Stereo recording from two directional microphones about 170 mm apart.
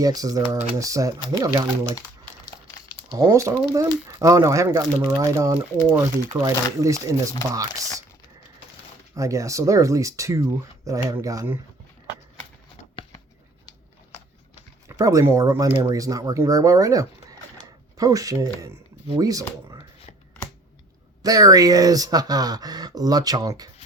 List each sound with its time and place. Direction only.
0.0 s speech: 20° right (ahead or behind)
3.2 s speech: 20° right (ahead or behind)
9.1 s speech: 20° right (ahead or behind)
14.8 s speech: 20° right (ahead or behind)
21.2 s speech: 20° right (ahead or behind)